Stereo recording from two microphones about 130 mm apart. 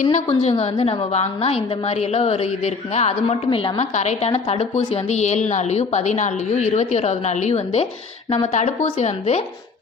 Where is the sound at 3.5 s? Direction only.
40° left (ahead or behind).